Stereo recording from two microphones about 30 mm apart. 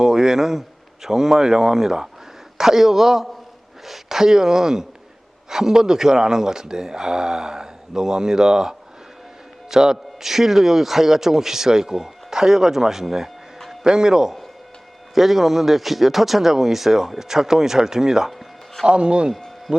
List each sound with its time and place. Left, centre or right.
0.0 s speech: centre
9.6 s a sound: centre
10.2 s speech: centre
15.1 s speech: centre
18.3 s music: centre
18.9 s a man's voice: right